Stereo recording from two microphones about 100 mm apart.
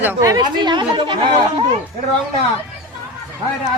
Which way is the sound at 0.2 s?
40° right (ahead or behind).